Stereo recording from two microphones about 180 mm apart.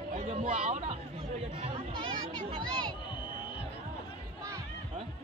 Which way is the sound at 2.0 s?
30° right (ahead or behind).